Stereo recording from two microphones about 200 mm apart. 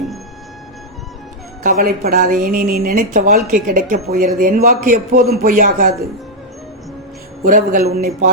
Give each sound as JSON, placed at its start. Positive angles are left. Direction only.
{"t": 1.6, "sound": "speech", "side_deg": -45}
{"t": 7.4, "sound": "speech", "side_deg": -45}